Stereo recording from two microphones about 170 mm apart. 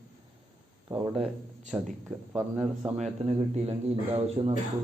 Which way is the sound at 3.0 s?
35° right (ahead or behind).